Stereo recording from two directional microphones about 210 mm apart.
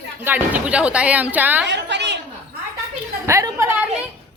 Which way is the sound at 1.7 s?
55° right (ahead or behind).